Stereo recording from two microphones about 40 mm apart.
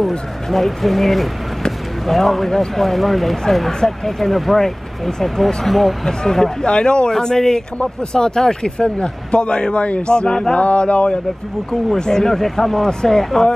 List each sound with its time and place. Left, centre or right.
0.5 s speech: centre
6.0 s a man's voice: centre
10.6 s a sound: left
11.9 s speech: centre